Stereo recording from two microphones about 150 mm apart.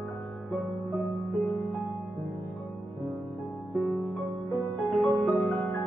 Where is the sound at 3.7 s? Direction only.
Centre (ahead or behind).